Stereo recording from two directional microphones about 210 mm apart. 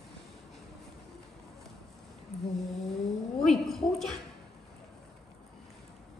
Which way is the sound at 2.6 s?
Centre (ahead or behind).